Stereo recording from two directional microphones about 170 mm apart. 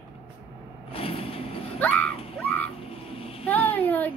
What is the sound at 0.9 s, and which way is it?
Vehicle, 35° left (ahead or behind).